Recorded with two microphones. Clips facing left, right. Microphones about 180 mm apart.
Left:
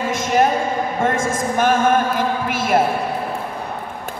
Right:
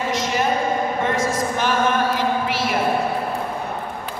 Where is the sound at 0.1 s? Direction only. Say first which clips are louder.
Left 5 dB; 50° left (ahead or behind).